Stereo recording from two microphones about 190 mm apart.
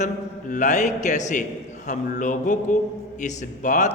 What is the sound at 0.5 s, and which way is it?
A man's voice, 40° left (ahead or behind).